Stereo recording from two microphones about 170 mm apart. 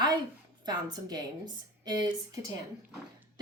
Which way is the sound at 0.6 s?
25° right (ahead or behind).